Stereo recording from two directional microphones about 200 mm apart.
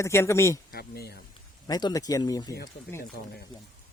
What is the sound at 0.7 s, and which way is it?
Speech, 50° left (ahead or behind).